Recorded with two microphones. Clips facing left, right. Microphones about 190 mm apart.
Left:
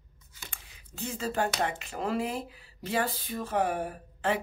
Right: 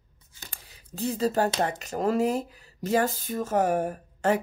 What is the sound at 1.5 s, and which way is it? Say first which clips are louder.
Speech: right 4 dB; 40° right (ahead or behind).